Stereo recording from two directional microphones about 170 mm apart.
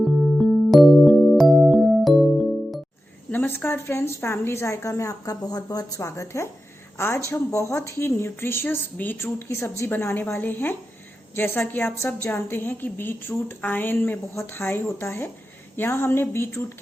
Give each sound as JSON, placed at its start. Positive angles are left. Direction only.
{"t": 0.0, "sound": "music", "side_deg": 0}
{"t": 3.2, "sound": "a woman's voice", "side_deg": 10}